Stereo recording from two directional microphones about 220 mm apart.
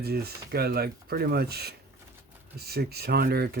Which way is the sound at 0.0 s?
45° right (ahead or behind).